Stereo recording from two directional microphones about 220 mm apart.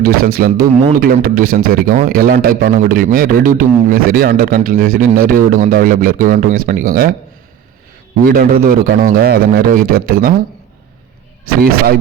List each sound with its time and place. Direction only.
0.0 s a man's voice: 45° right (ahead or behind)
8.2 s a man's voice: 40° right (ahead or behind)